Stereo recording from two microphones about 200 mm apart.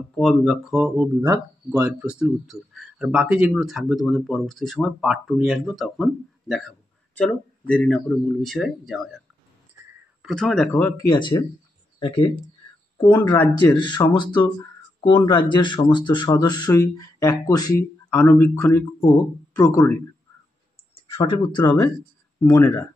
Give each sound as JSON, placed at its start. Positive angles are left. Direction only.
{"t": 0.1, "sound": "speech", "side_deg": 0}
{"t": 10.2, "sound": "speech", "side_deg": 0}
{"t": 13.2, "sound": "speech", "side_deg": 20}
{"t": 20.9, "sound": "speech", "side_deg": 25}